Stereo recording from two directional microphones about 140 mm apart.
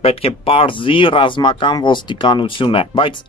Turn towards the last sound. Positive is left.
turn(degrees=40)  # may be behind; listen again after turning